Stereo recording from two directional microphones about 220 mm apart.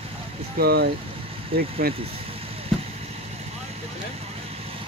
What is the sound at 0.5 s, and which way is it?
Speech, 45° right (ahead or behind).